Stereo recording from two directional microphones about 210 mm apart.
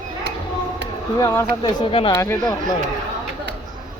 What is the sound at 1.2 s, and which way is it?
Speech, 10° left (ahead or behind).